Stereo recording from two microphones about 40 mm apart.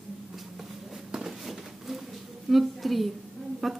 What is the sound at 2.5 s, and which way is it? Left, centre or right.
A woman's voice, centre.